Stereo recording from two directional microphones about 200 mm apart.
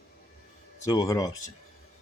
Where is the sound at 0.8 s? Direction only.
15° left (ahead or behind).